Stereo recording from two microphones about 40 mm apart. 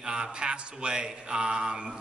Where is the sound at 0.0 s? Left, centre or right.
Right.